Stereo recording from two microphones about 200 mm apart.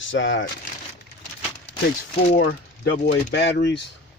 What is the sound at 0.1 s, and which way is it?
Speech, 70° left (ahead or behind).